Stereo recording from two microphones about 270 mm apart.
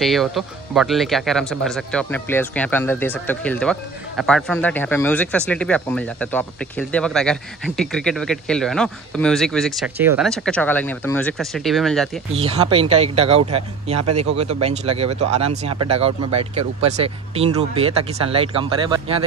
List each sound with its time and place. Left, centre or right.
0.0 s speech: centre
12.4 s speech: right